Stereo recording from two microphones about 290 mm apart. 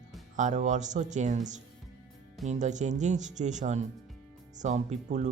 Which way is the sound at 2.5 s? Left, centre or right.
Right.